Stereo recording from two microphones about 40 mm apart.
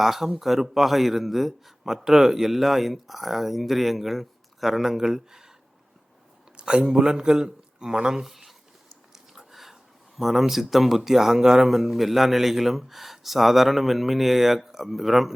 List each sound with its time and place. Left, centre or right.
0.0 s speech: centre
6.6 s speech: right
8.2 s speech: centre
9.1 s a sound: centre
10.2 s speech: centre